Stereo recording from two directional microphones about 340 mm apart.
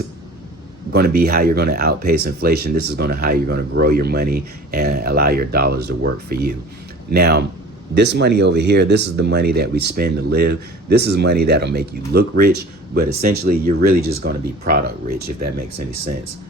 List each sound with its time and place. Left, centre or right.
0.9 s speech: right